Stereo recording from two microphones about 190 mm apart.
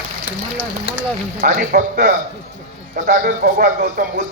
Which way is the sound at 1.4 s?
45° right (ahead or behind).